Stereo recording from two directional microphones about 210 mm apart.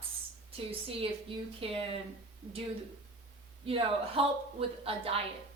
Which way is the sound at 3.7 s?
25° right (ahead or behind).